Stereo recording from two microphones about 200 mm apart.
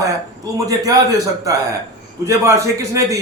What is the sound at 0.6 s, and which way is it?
A man's voice, 20° right (ahead or behind).